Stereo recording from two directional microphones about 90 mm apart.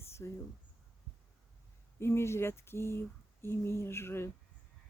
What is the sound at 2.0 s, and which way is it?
Speech, 30° left (ahead or behind).